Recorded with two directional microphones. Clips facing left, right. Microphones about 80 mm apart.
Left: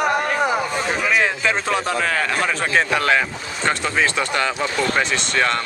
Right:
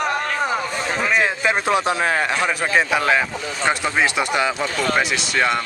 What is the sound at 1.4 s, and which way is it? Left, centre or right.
Speech, centre.